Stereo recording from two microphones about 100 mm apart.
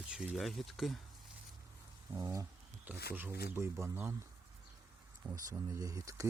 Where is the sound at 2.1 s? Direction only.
30° right (ahead or behind).